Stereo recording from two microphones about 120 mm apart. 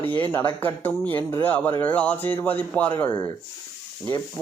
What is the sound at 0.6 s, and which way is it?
A man's voice, 15° left (ahead or behind).